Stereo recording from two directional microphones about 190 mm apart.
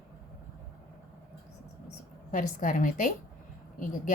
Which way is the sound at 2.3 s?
40° left (ahead or behind).